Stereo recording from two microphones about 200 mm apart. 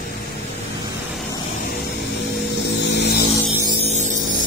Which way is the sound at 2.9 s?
60° left (ahead or behind).